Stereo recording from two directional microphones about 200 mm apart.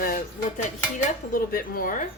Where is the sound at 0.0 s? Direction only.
45° left (ahead or behind).